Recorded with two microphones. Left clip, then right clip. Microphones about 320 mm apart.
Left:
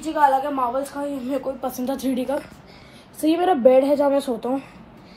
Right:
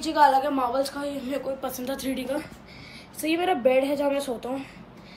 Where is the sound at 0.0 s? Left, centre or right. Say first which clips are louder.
Left 1 dB; centre.